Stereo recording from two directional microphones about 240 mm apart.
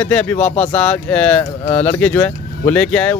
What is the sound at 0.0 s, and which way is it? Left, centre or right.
Speech, centre.